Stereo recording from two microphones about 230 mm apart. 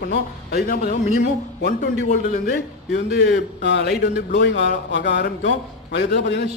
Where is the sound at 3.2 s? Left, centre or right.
Left.